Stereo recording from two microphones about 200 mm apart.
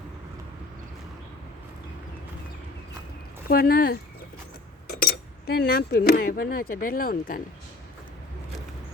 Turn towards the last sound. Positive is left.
turn(degrees=45)  # may be behind; listen again after turning